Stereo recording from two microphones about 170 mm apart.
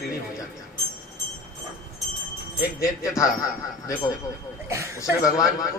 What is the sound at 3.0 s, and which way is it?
Speech, 20° left (ahead or behind).